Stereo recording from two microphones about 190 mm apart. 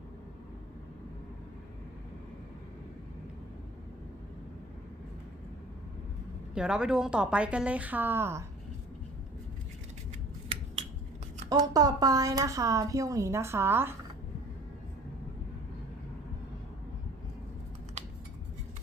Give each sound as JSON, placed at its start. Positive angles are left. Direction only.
{"t": 6.5, "sound": "a woman's voice", "side_deg": -5}
{"t": 11.4, "sound": "a woman's voice", "side_deg": -20}